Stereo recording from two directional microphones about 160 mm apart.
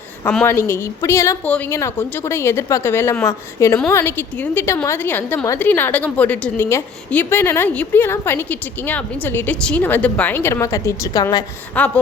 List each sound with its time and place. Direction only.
0.3 s a woman's voice: 10° left (ahead or behind)
11.8 s a woman's voice: 10° left (ahead or behind)